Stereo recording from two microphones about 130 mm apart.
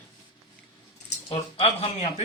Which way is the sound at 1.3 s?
40° left (ahead or behind).